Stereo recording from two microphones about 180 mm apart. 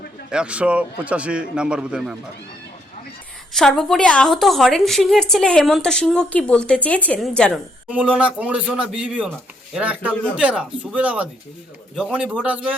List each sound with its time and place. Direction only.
0.3 s a man's voice: 5° right (ahead or behind)
3.5 s a woman's voice: centre (ahead or behind)